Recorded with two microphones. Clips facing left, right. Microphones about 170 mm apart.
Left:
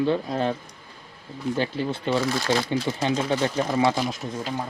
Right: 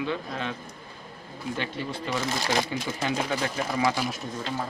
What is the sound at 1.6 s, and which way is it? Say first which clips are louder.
Speech: left 7 dB; 30° left (ahead or behind).